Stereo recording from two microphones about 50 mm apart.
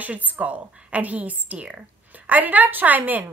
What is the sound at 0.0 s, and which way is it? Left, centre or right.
A woman's voice, right.